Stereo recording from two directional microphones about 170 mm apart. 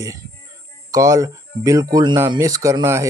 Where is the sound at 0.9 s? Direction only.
20° right (ahead or behind).